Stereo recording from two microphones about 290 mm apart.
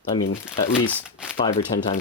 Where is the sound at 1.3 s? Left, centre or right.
Left.